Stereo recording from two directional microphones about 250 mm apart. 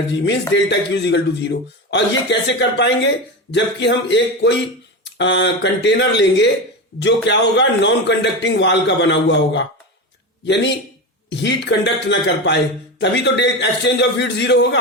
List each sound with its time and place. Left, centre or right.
0.3 s a man's voice: left